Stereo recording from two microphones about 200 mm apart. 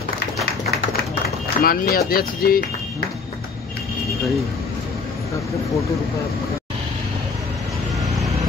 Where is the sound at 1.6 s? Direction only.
50° left (ahead or behind).